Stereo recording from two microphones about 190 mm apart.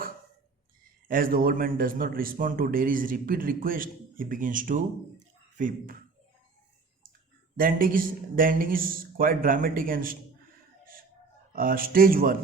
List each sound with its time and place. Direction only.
1.0 s speech: 50° right (ahead or behind)
7.5 s speech: 50° right (ahead or behind)
11.5 s speech: 50° right (ahead or behind)